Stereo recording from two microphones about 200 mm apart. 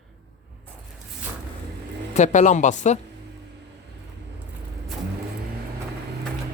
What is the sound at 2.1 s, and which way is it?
Speech, 35° left (ahead or behind).